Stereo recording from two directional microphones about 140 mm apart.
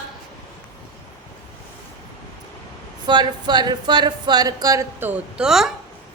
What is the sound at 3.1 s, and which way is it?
A woman's voice, 30° right (ahead or behind).